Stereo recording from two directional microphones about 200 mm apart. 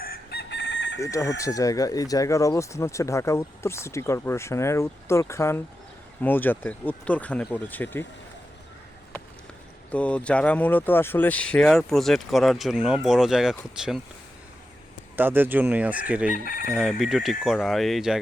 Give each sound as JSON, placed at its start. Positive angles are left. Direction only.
{"t": 0.0, "sound": "chicken", "side_deg": 50}
{"t": 1.0, "sound": "speech", "side_deg": 15}
{"t": 9.9, "sound": "speech", "side_deg": 5}
{"t": 15.1, "sound": "fowl", "side_deg": -10}
{"t": 16.3, "sound": "chicken", "side_deg": 45}
{"t": 16.7, "sound": "speech", "side_deg": 0}